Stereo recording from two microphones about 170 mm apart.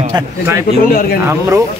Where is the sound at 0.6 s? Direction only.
60° left (ahead or behind).